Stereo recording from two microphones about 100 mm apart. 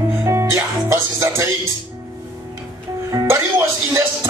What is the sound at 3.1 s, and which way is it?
Speech, 35° right (ahead or behind).